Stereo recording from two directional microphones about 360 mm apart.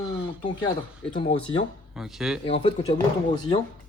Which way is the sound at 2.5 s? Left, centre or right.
Centre.